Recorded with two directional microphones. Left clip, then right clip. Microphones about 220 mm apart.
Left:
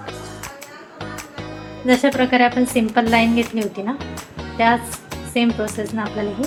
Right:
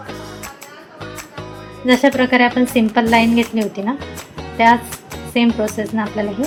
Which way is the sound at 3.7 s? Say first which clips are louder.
Right 3 dB; 30° right (ahead or behind).